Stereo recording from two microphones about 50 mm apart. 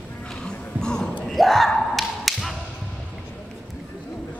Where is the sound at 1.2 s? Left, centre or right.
Centre.